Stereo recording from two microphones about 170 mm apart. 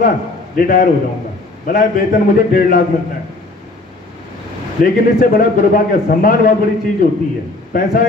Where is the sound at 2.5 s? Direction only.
55° left (ahead or behind).